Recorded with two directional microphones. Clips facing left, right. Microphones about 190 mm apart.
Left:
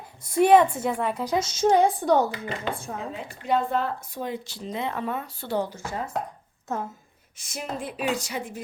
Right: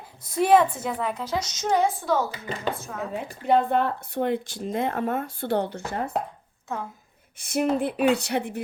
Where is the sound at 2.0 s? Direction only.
15° left (ahead or behind).